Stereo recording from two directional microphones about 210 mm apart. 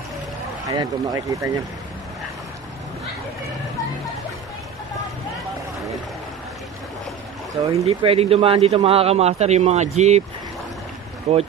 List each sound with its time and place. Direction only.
0.7 s speech: 15° right (ahead or behind)
7.8 s speech: 30° right (ahead or behind)
11.3 s speech: 30° right (ahead or behind)